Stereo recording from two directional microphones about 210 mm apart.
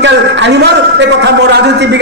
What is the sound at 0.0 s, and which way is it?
A man's voice, 55° right (ahead or behind).